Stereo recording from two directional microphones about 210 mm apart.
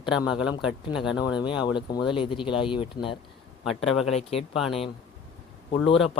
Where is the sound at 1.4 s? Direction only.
20° left (ahead or behind).